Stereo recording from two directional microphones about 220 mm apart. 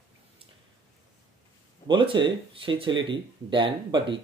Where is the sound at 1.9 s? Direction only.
20° right (ahead or behind).